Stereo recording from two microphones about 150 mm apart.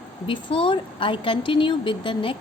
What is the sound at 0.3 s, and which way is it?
A woman's voice, 35° left (ahead or behind).